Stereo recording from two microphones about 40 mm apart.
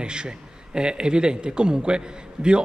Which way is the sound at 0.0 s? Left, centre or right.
Right.